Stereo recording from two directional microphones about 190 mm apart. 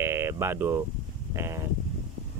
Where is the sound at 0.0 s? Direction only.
15° right (ahead or behind).